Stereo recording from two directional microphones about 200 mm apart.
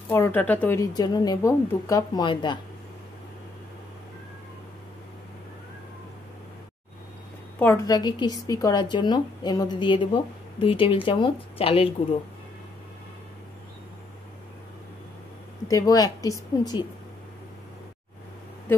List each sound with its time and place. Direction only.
0.1 s a woman's voice: 10° left (ahead or behind)
7.5 s a woman's voice: 10° left (ahead or behind); by 11.9 s 30° left (ahead or behind)
15.7 s a woman's voice: 20° left (ahead or behind)